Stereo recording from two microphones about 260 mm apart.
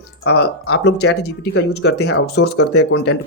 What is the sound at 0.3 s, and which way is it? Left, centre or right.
A man's voice, left.